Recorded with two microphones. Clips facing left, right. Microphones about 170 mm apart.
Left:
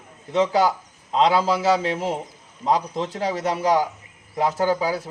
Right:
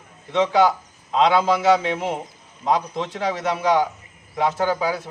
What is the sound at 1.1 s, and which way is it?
A man's voice, 35° left (ahead or behind).